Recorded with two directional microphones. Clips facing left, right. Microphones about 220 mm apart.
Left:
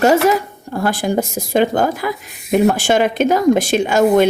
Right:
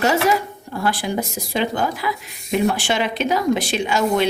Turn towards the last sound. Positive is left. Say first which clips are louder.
# left 7 dB
turn(degrees=45)  # may be behind; listen again after turning